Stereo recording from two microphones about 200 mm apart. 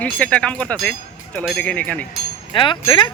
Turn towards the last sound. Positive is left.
turn(degrees=25)  # may be behind; listen again after turning